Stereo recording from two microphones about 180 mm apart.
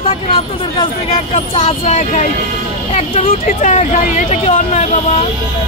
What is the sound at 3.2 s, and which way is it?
Speech, 45° left (ahead or behind).